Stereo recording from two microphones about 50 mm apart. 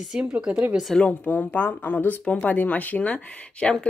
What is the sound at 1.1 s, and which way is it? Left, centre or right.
Speech, left.